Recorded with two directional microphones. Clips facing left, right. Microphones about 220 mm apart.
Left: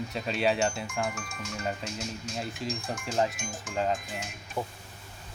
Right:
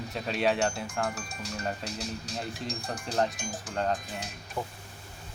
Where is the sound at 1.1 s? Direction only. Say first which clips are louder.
Even; 35° right (ahead or behind).